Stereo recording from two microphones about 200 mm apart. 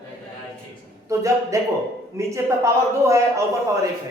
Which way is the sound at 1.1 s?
15° right (ahead or behind).